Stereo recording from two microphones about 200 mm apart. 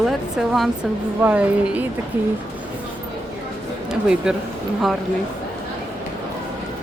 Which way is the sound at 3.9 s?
5° right (ahead or behind).